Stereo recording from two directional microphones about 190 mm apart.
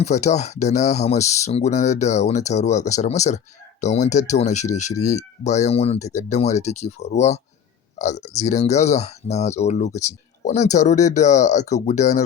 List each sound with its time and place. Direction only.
0.0 s speech: 35° left (ahead or behind)